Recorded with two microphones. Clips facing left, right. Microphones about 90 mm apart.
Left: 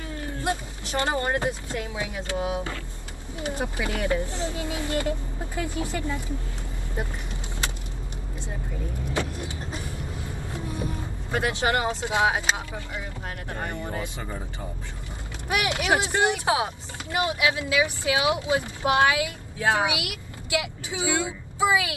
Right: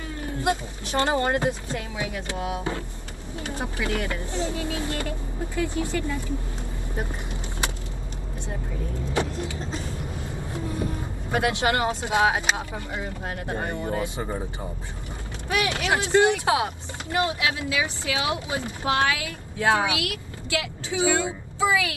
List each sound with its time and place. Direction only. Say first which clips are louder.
0.9 s speech: right 3 dB; 20° right (ahead or behind)
2.0 s speech: left 2 dB; 20° left (ahead or behind)
10.5 s a sound: right 3 dB; 20° left (ahead or behind)
11.3 s speech: right 1 dB; 20° left (ahead or behind)
11.9 s speech: right 2 dB; 20° right (ahead or behind)
15.4 s speech: even; 20° left (ahead or behind)